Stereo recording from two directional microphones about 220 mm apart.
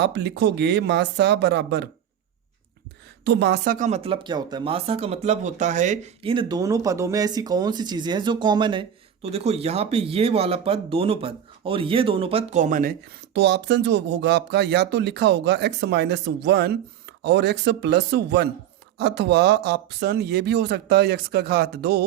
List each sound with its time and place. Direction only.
0.0 s speech: 50° right (ahead or behind)
3.2 s speech: 50° right (ahead or behind)